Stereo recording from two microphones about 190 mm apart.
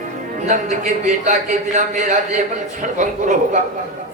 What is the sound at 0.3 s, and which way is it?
Speech, 40° right (ahead or behind).